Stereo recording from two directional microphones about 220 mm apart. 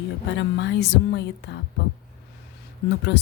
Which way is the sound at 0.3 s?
50° left (ahead or behind).